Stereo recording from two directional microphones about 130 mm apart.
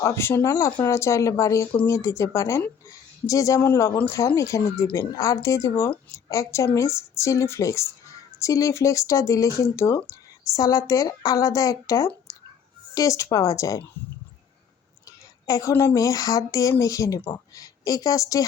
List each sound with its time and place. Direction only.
0.0 s a woman's voice: 20° left (ahead or behind)
15.4 s speech: 25° left (ahead or behind)
17.2 s speech: 45° left (ahead or behind)
17.5 s a woman's voice: 25° left (ahead or behind)